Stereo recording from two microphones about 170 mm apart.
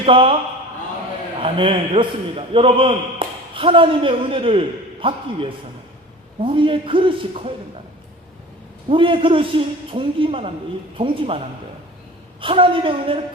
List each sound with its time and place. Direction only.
0.0 s a man's voice: 30° right (ahead or behind)
1.4 s a man's voice: 30° right (ahead or behind)
8.9 s a man's voice: 30° right (ahead or behind)